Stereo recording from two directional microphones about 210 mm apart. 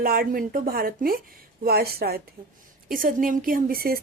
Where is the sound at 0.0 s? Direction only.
45° right (ahead or behind).